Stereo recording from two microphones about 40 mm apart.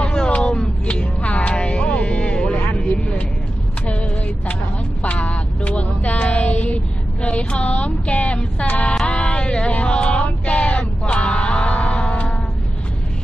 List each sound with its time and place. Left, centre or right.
0.0 s a sound: left
0.3 s music: left
2.5 s vehicle: left
5.1 s vehicle: left
8.5 s music: left
9.1 s a sound: left